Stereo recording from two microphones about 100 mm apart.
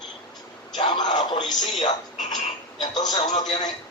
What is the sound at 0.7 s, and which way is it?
A man's voice, 50° left (ahead or behind).